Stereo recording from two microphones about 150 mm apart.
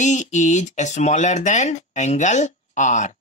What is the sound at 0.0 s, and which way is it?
Speech, 50° left (ahead or behind).